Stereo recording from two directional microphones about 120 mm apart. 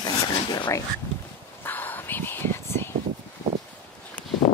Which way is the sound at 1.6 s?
15° left (ahead or behind).